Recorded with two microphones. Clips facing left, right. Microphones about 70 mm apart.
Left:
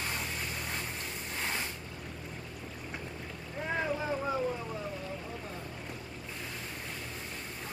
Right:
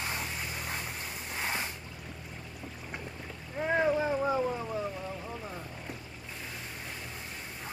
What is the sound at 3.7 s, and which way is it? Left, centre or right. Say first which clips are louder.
Boat: right 6 dB; centre.